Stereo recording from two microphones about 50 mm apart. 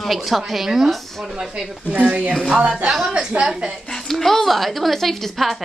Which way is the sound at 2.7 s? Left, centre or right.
Centre.